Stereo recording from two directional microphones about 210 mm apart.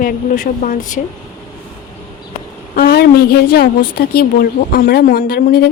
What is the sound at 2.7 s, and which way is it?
Speech, 45° left (ahead or behind).